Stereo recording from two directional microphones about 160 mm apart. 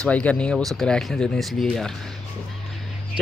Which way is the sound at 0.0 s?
10° left (ahead or behind).